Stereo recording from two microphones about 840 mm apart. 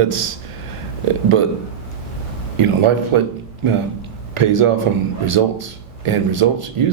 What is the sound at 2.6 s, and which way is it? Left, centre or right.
Speech, right.